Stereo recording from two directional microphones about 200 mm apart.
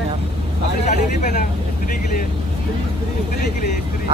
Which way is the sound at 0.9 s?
35° left (ahead or behind).